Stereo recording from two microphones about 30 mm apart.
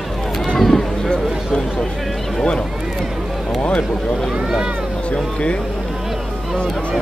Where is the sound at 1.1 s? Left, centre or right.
Left.